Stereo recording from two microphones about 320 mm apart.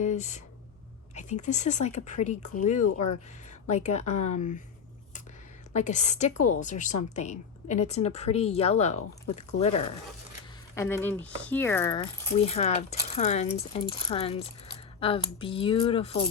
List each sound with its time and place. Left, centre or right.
0.0 s a woman's voice: left
2.8 s speech: left
3.7 s a woman's voice: left
5.7 s a woman's voice: left
10.8 s a woman's voice: centre